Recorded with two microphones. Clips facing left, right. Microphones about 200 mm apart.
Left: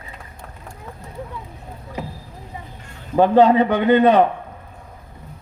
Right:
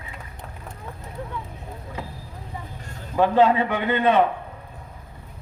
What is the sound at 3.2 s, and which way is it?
A man's voice, 40° left (ahead or behind).